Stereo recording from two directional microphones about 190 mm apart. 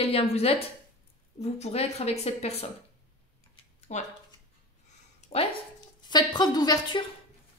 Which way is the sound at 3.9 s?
35° left (ahead or behind).